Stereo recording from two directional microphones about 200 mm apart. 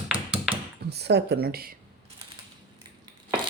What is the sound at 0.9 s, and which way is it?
Speech, 55° right (ahead or behind).